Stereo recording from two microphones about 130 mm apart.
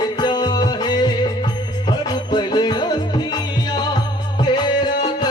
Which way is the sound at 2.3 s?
35° left (ahead or behind).